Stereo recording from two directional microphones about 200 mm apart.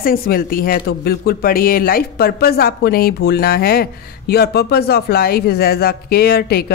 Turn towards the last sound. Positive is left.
turn(degrees=50)  # may be behind; listen again after turning